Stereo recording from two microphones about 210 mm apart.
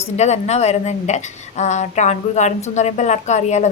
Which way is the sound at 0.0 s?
30° left (ahead or behind).